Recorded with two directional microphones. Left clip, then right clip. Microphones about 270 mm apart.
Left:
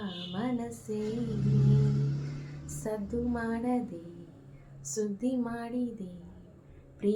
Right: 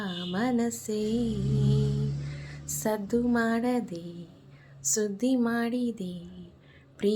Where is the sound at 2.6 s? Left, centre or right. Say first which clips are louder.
Right 6 dB; right.